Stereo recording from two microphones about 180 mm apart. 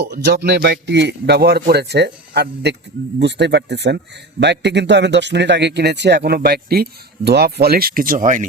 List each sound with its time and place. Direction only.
0.1 s speech: 65° right (ahead or behind); by 8.4 s 45° right (ahead or behind)